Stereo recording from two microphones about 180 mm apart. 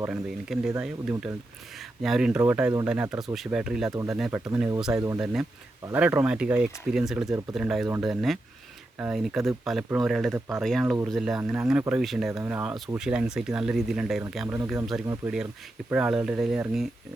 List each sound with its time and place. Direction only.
0.0 s speech: 5° right (ahead or behind)
3.9 s speech: 15° right (ahead or behind)
5.2 s speech: centre (ahead or behind)
12.4 s speech: 10° right (ahead or behind)
15.0 s speech: 20° right (ahead or behind)
15.9 s speech: 5° right (ahead or behind)